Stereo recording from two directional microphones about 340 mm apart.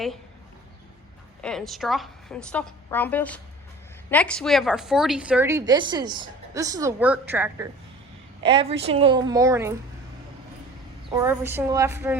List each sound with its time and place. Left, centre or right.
1.4 s a woman's voice: centre
11.1 s a woman's voice: centre